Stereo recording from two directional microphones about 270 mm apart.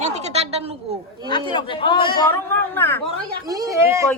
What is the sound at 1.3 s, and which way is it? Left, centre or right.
A man's voice, centre.